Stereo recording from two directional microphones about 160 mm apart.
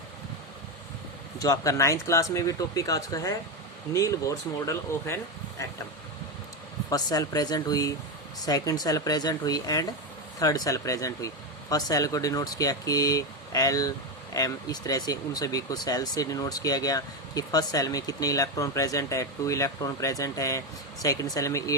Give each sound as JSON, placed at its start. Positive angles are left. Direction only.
{"t": 1.4, "sound": "speech", "side_deg": 20}
{"t": 6.9, "sound": "speech", "side_deg": 25}